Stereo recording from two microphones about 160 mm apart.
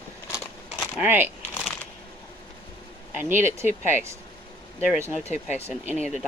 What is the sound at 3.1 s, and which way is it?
Speech, 15° right (ahead or behind).